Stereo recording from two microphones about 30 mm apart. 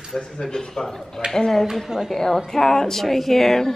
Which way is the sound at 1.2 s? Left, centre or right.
Right.